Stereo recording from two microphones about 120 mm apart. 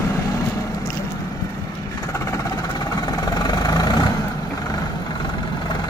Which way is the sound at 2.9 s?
30° left (ahead or behind).